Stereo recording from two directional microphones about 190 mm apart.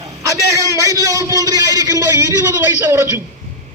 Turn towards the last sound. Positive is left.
turn(degrees=-15)  # may be behind; listen again after turning